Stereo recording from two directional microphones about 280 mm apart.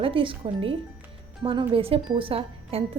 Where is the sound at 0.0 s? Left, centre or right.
Centre.